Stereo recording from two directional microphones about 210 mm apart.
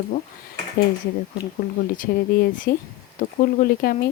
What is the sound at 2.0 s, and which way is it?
Speech, 45° left (ahead or behind).